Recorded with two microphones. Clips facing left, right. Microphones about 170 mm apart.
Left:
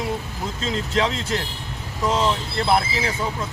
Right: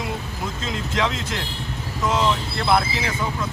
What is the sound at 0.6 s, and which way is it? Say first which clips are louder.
Speech: left 3 dB; 35° left (ahead or behind).